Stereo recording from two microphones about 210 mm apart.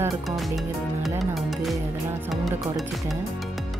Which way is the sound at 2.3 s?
Centre (ahead or behind).